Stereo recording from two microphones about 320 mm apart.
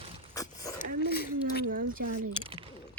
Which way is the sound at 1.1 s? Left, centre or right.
Left.